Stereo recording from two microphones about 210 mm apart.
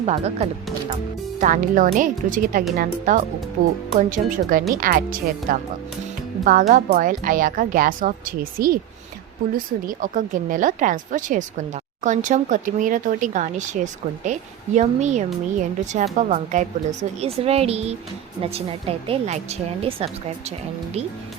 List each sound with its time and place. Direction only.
0.0 s speech: 30° right (ahead or behind)
9.8 s speech: 40° right (ahead or behind)